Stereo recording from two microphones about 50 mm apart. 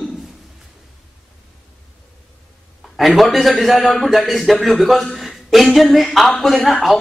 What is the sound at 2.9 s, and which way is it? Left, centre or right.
A man's voice, centre.